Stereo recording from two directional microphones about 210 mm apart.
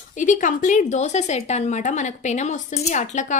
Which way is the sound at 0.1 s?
35° left (ahead or behind).